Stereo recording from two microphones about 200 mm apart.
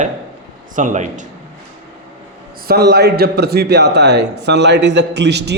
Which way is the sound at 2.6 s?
55° right (ahead or behind).